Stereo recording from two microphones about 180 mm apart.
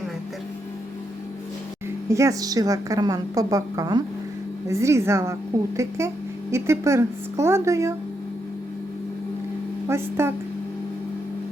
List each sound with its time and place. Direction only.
2.0 s a woman's voice: 15° right (ahead or behind)
9.9 s a woman's voice: 15° right (ahead or behind)